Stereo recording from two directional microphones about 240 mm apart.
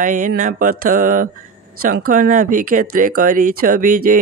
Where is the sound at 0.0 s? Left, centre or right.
Right.